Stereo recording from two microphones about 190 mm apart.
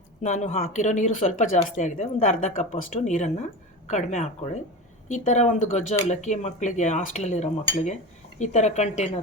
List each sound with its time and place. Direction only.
0.2 s speech: 40° left (ahead or behind)